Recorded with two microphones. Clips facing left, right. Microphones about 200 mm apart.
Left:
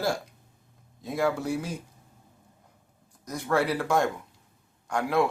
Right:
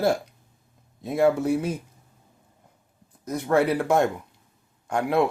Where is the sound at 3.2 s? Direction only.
20° right (ahead or behind).